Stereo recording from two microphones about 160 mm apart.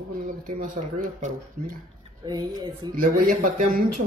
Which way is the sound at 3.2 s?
65° right (ahead or behind).